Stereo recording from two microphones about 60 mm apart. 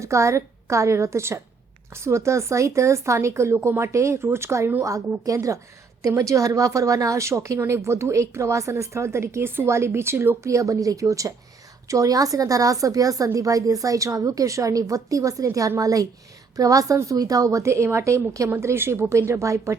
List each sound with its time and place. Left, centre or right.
0.0 s a woman's voice: right
4.2 s speech: right
4.8 s a woman's voice: right
6.0 s a woman's voice: right
10.5 s a woman's voice: right
18.6 s a woman's voice: right